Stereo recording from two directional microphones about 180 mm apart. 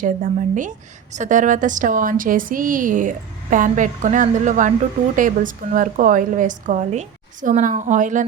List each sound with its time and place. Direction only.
0.0 s a woman's voice: 45° right (ahead or behind)